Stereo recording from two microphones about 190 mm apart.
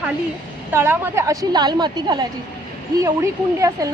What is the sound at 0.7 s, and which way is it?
A woman's voice, 10° right (ahead or behind).